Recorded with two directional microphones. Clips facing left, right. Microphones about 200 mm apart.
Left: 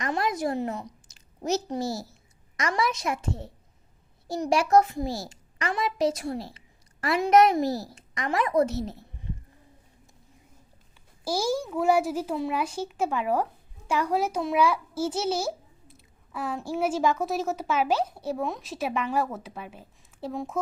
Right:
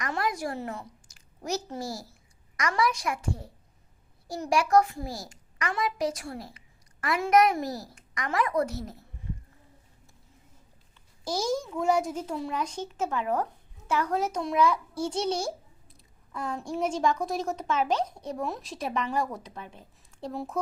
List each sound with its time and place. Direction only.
0.0 s a woman's voice: 25° left (ahead or behind)
11.3 s a child's voice: 10° left (ahead or behind)